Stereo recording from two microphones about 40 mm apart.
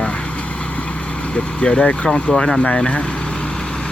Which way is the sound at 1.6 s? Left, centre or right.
Left.